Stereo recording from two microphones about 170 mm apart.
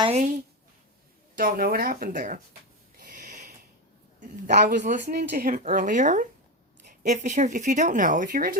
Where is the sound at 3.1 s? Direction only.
50° right (ahead or behind).